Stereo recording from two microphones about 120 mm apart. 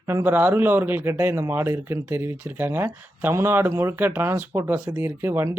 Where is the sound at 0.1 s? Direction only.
20° right (ahead or behind).